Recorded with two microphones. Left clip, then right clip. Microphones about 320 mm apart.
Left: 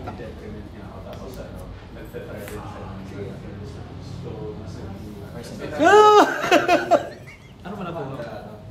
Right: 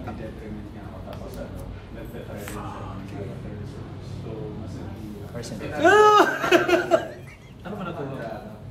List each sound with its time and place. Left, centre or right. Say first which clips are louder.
5.8 s laughter: left 3 dB; left